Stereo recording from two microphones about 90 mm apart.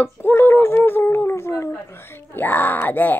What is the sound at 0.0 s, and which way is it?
Speech, 25° left (ahead or behind).